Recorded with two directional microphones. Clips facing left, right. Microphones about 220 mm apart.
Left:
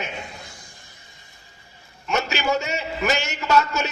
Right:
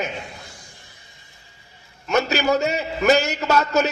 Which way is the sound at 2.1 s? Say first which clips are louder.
Right 4 dB; 40° right (ahead or behind).